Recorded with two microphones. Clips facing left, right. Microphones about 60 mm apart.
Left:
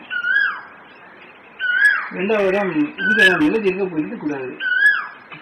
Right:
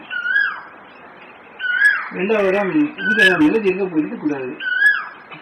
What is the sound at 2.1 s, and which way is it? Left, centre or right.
Speech, right.